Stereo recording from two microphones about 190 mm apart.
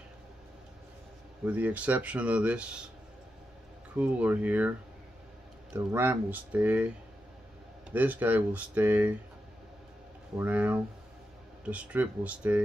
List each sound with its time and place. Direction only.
1.4 s speech: 10° right (ahead or behind)
4.0 s speech: 10° right (ahead or behind)
7.9 s speech: 10° right (ahead or behind)
10.3 s speech: 10° right (ahead or behind)